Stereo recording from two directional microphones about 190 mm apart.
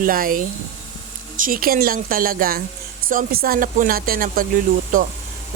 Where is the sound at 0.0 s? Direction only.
50° right (ahead or behind).